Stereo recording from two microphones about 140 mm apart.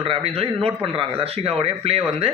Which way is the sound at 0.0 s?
40° right (ahead or behind).